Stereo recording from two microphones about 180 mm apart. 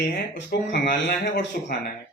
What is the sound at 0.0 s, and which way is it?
Speech, 65° left (ahead or behind).